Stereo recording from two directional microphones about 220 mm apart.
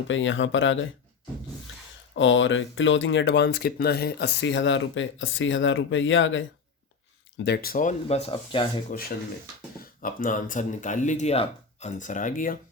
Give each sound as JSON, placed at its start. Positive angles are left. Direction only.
{"t": 0.1, "sound": "speech", "side_deg": 60}
{"t": 2.1, "sound": "speech", "side_deg": 60}
{"t": 7.4, "sound": "speech", "side_deg": 45}
{"t": 10.0, "sound": "speech", "side_deg": 40}